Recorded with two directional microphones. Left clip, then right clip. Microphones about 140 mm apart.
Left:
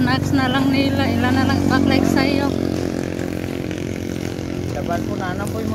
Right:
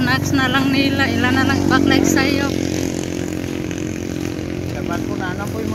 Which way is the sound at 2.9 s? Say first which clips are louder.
Right 1 dB; 50° left (ahead or behind).